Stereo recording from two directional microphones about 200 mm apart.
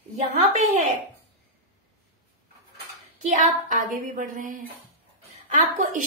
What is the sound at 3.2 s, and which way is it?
A woman's voice, 40° right (ahead or behind).